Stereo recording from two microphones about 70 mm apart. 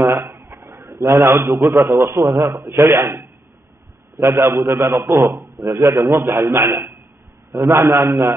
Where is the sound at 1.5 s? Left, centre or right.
Right.